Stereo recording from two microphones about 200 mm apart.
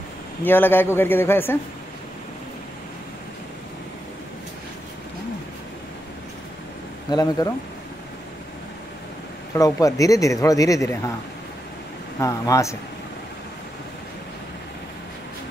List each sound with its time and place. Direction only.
0.4 s a man's voice: 10° left (ahead or behind)
7.1 s speech: 20° left (ahead or behind)
9.6 s a man's voice: 15° left (ahead or behind)
12.2 s a man's voice: 15° left (ahead or behind)